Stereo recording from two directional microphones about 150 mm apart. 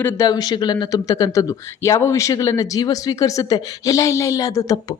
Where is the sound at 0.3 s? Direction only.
25° left (ahead or behind).